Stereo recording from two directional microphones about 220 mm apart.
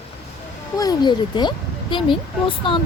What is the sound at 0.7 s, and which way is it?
A woman's voice, 15° left (ahead or behind).